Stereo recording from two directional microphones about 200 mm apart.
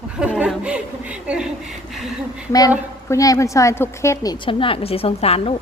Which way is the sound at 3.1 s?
15° left (ahead or behind).